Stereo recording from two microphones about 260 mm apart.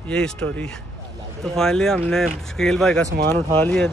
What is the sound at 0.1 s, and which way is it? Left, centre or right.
Speech, centre.